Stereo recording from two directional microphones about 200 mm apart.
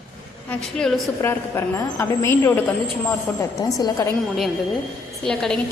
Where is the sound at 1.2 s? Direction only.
10° left (ahead or behind).